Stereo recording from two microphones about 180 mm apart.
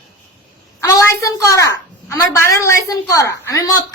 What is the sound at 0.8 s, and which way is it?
A woman's voice, 20° left (ahead or behind).